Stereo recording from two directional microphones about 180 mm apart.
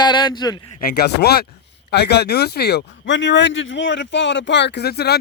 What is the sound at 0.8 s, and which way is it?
A man's voice, 60° left (ahead or behind).